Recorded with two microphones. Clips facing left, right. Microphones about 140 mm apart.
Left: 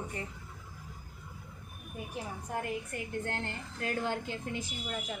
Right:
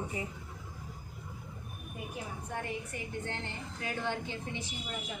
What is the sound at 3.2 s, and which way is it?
Speech, 50° left (ahead or behind).